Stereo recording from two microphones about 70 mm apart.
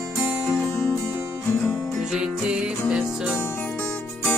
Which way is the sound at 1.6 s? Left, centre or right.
Centre.